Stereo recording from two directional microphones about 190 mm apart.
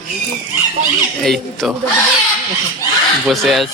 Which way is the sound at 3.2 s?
Centre (ahead or behind).